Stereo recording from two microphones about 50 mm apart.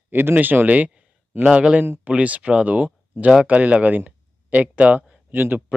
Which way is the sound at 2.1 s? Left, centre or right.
Right.